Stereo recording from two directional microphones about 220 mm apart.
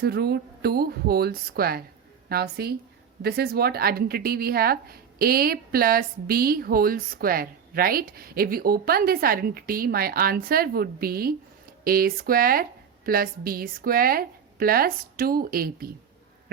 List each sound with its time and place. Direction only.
0.0 s a woman's voice: 45° right (ahead or behind)